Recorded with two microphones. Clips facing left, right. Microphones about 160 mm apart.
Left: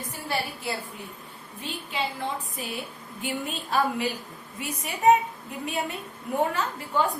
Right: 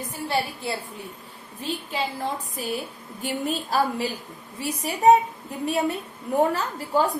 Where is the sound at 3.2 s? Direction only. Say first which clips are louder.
Right 4 dB; 35° right (ahead or behind).